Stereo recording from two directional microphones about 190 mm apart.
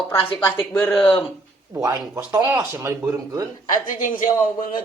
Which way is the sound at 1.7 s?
15° right (ahead or behind).